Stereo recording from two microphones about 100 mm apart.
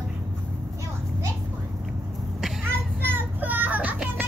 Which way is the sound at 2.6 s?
20° right (ahead or behind).